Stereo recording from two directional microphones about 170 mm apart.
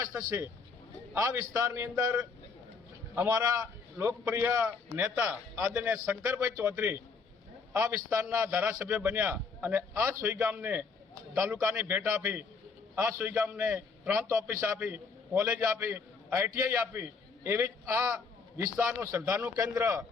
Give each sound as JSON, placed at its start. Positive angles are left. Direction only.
{"t": 0.0, "sound": "a man's voice", "side_deg": -20}